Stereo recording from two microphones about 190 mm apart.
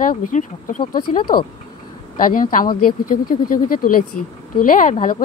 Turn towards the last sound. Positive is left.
turn(degrees=45)  # may be behind; listen again after turning